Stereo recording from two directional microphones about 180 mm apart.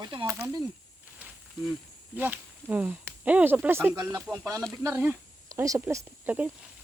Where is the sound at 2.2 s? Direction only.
10° right (ahead or behind).